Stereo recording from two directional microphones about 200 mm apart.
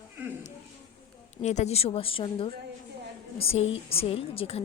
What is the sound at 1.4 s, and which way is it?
A woman's voice, 35° left (ahead or behind).